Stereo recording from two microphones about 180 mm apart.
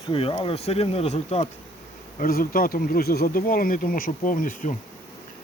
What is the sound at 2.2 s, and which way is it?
Speech, 50° left (ahead or behind).